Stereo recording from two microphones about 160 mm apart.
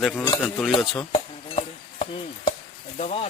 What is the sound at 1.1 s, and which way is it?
Chopping, 35° left (ahead or behind).